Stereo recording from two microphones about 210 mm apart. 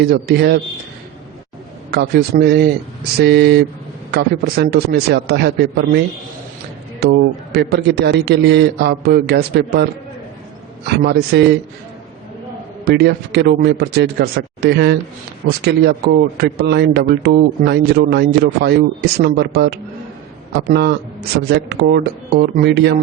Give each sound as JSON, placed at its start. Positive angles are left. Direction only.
{"t": 0.0, "sound": "a man's voice", "side_deg": -50}
{"t": 1.9, "sound": "a man's voice", "side_deg": -50}
{"t": 7.0, "sound": "a man's voice", "side_deg": -50}
{"t": 10.8, "sound": "a man's voice", "side_deg": -50}
{"t": 12.8, "sound": "a man's voice", "side_deg": -50}